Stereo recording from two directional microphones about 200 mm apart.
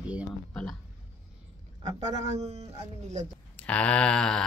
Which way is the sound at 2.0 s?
35° right (ahead or behind).